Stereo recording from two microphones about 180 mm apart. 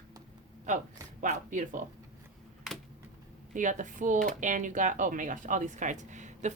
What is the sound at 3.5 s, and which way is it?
Speech, 45° right (ahead or behind).